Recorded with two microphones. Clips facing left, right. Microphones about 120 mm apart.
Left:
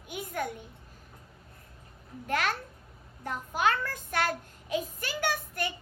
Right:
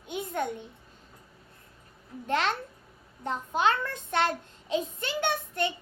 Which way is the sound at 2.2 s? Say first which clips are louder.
Right 2 dB; 25° right (ahead or behind).